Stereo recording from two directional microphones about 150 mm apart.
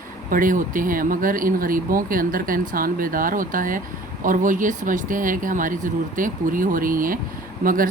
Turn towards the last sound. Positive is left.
turn(degrees=-70)  # may be behind; listen again after turning